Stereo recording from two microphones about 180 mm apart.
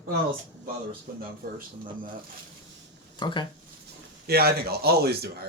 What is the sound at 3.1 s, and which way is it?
Speech, 25° left (ahead or behind).